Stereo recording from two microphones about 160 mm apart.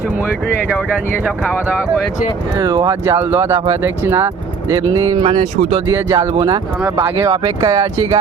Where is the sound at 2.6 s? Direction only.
25° right (ahead or behind).